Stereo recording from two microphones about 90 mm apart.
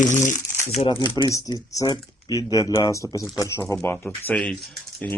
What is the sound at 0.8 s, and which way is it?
Speech, 60° left (ahead or behind).